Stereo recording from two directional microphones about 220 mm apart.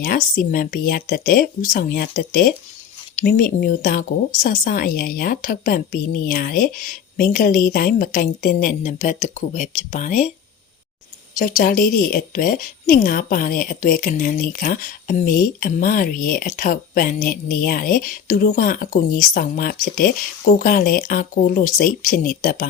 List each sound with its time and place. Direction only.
0.0 s speech: 40° left (ahead or behind)
11.3 s speech: 40° left (ahead or behind)